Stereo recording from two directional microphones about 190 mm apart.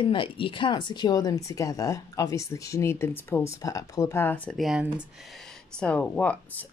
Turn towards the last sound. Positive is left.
turn(degrees=5)  # may be behind; listen again after turning